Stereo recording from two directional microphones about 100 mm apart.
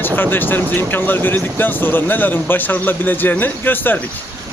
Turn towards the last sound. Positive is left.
turn(degrees=20)  # may be behind; listen again after turning